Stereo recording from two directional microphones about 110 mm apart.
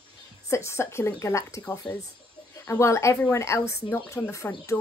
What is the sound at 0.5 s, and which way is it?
Speech, 25° left (ahead or behind).